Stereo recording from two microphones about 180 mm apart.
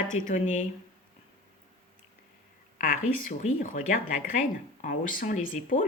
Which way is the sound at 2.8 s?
50° left (ahead or behind).